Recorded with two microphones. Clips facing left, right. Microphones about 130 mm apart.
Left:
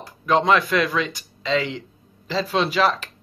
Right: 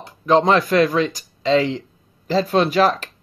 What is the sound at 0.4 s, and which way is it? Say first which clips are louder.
Speech: right 3 dB; 40° right (ahead or behind).